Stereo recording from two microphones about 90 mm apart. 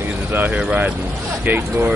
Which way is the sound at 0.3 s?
20° right (ahead or behind).